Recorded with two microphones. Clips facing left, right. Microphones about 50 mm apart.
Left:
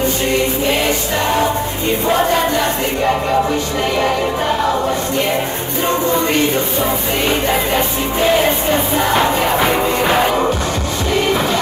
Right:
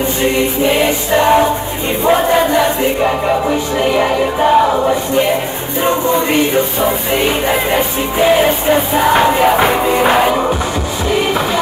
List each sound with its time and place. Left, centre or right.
0.2 s music: centre
2.0 s a sound: centre
3.4 s music: centre
5.8 s music: centre